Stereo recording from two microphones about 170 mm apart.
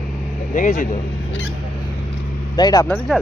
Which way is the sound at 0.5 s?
50° left (ahead or behind).